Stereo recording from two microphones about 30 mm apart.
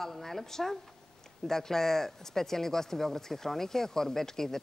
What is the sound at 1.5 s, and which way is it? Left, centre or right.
Speech, centre.